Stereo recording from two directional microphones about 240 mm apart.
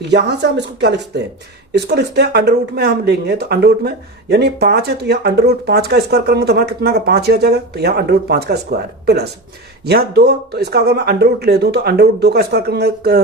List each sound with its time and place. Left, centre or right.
0.1 s speech: right